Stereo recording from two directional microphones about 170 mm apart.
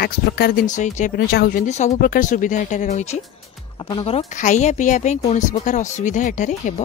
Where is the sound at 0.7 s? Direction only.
45° left (ahead or behind).